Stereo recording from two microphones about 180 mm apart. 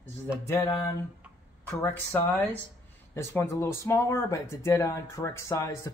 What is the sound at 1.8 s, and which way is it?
Speech, 10° left (ahead or behind).